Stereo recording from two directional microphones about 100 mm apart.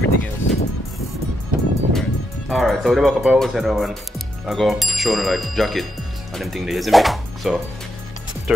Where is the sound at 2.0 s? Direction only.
Centre (ahead or behind).